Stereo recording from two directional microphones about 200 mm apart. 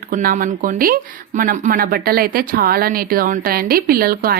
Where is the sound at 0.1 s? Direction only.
45° right (ahead or behind).